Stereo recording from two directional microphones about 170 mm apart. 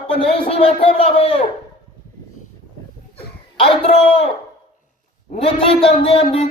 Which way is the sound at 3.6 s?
35° left (ahead or behind).